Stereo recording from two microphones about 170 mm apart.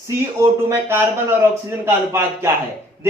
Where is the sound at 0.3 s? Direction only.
15° right (ahead or behind).